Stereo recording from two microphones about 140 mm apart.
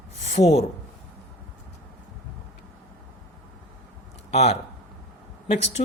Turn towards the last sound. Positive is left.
turn(degrees=50)  # may be behind; listen again after turning